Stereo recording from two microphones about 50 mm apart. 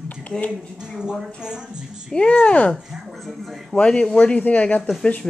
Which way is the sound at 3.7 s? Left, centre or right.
Centre.